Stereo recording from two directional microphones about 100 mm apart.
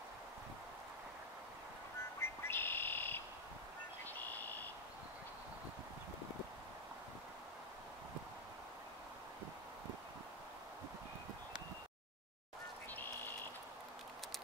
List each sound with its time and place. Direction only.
2.1 s music: 25° left (ahead or behind)
4.0 s a sound: 20° left (ahead or behind)
12.9 s frog: 20° left (ahead or behind)